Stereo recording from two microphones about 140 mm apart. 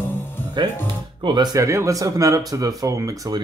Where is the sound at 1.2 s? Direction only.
30° right (ahead or behind).